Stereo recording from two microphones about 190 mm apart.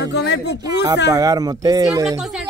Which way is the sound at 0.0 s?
60° left (ahead or behind).